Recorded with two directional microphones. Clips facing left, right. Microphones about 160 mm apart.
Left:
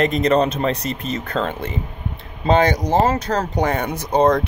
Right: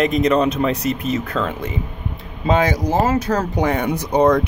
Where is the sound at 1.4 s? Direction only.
30° left (ahead or behind).